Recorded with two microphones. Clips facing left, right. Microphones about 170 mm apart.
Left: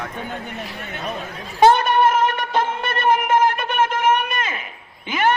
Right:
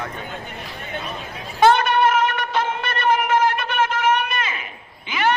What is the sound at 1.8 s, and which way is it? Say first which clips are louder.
Music: left 1 dB; 45° left (ahead or behind).